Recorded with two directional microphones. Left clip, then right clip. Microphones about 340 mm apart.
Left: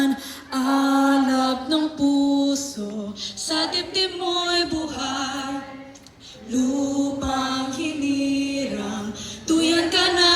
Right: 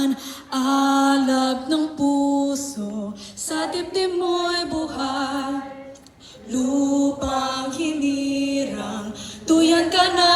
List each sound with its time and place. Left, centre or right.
0.0 s music: right; by 5.5 s centre
6.7 s chant: centre
9.5 s a sound: centre